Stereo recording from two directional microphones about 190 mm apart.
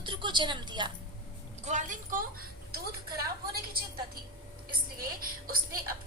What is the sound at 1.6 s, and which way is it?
Speech, 40° right (ahead or behind).